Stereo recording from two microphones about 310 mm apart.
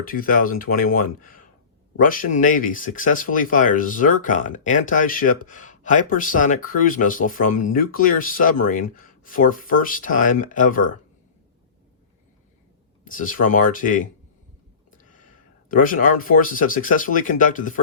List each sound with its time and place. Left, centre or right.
0.0 s speech: left
13.1 s speech: left
14.8 s a sound: left
15.7 s speech: left